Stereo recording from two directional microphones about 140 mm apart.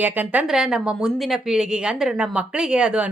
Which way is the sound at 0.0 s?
10° right (ahead or behind).